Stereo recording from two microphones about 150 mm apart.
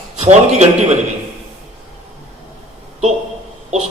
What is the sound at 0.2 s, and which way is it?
Speech, 45° right (ahead or behind).